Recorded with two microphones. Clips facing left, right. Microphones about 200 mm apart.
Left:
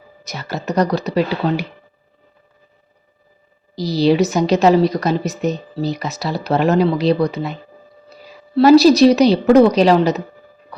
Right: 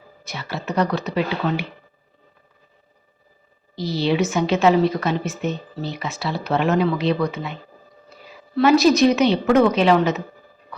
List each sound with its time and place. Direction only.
0.3 s a woman's voice: 40° left (ahead or behind)
3.8 s a woman's voice: 40° left (ahead or behind)